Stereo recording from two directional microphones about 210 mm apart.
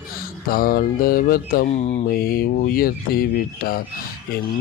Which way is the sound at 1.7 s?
30° left (ahead or behind).